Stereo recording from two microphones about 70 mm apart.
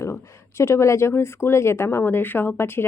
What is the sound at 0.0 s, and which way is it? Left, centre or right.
Speech, left.